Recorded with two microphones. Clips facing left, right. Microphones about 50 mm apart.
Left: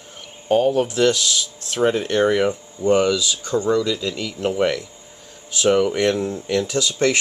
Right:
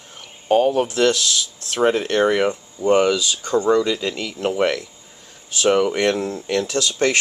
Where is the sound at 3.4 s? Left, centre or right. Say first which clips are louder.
Right 3 dB; right.